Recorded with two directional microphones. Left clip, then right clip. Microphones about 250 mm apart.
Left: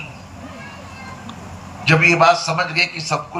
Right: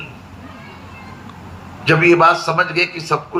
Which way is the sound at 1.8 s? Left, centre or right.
Centre.